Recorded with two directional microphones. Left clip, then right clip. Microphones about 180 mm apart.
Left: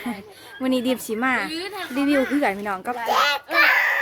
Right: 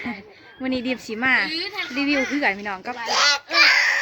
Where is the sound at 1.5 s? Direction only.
55° left (ahead or behind).